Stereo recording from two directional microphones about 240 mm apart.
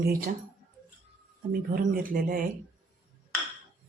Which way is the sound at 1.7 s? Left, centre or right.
Right.